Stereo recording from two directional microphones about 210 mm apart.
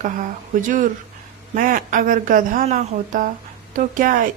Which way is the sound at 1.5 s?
40° right (ahead or behind).